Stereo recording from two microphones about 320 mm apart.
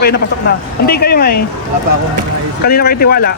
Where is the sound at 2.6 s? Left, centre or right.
Left.